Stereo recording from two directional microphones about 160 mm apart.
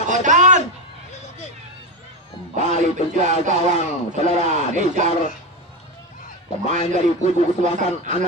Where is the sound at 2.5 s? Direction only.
50° right (ahead or behind).